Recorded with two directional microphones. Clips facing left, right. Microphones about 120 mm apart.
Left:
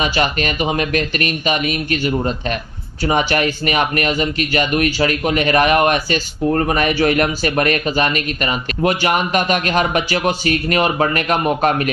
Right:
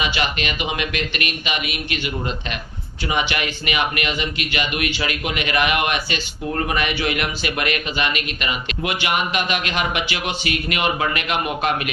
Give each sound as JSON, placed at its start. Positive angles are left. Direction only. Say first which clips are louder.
{"t": 0.0, "sound": "speech", "louder": "left 5 dB", "side_deg": 40}